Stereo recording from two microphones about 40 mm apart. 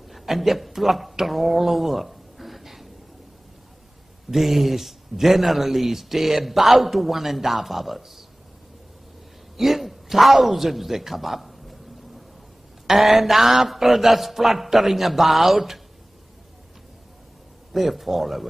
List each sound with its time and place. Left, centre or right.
0.1 s a man's voice: centre
4.3 s speech: centre
9.6 s a man's voice: centre
12.8 s speech: centre
17.7 s speech: centre